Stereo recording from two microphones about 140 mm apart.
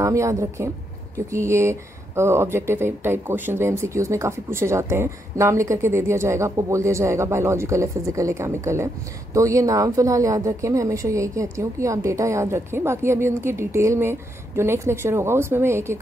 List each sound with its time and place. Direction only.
0.0 s a woman's voice: 20° right (ahead or behind)